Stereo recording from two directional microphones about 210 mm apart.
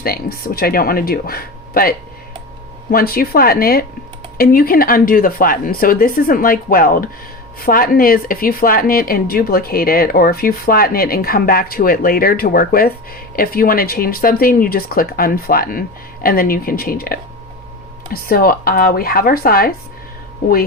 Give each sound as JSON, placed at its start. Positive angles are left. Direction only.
{"t": 0.0, "sound": "speech", "side_deg": 45}